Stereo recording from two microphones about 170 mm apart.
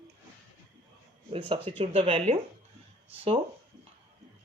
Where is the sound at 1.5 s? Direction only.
30° right (ahead or behind).